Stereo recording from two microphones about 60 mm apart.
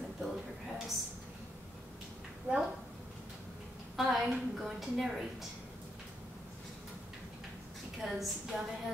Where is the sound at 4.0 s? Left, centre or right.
Centre.